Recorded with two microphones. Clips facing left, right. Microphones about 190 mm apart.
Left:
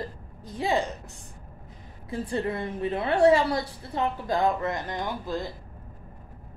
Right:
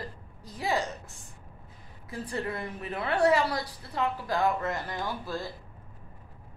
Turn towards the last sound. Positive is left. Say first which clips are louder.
# left 3 dB
turn(degrees=20)  # may be behind; listen again after turning